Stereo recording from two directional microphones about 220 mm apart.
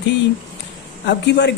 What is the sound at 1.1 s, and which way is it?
Speech, 50° left (ahead or behind).